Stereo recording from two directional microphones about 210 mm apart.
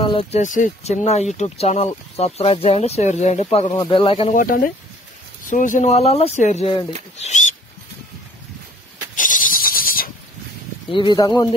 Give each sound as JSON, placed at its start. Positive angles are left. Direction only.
{"t": 0.0, "sound": "speech", "side_deg": 25}
{"t": 4.4, "sound": "speech", "side_deg": 40}
{"t": 9.1, "sound": "goat", "side_deg": 40}
{"t": 10.9, "sound": "speech", "side_deg": 20}